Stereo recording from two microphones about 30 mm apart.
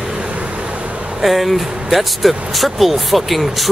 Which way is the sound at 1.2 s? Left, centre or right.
Centre.